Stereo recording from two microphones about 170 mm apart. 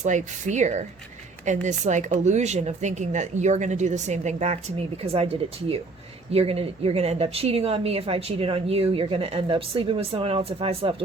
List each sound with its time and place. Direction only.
0.0 s speech: 45° right (ahead or behind)